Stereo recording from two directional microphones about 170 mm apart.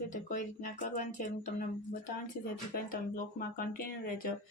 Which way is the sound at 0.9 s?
45° left (ahead or behind).